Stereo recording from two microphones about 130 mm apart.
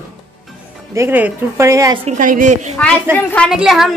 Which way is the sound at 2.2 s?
90° right.